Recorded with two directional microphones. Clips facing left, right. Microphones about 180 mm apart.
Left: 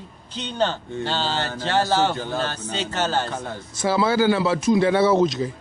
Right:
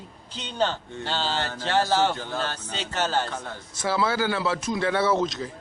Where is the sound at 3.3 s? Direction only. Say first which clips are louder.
Left 4 dB; 10° left (ahead or behind).